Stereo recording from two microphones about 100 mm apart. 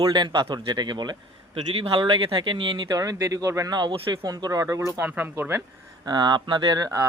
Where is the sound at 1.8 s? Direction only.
60° right (ahead or behind); by 5.6 s 20° right (ahead or behind).